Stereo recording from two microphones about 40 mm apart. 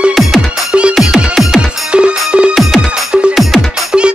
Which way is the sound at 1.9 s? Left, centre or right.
Right.